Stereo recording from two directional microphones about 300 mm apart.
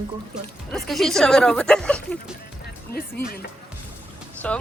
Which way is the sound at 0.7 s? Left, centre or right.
Centre.